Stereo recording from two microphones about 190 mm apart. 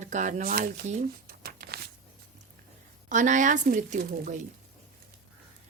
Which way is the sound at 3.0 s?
40° right (ahead or behind).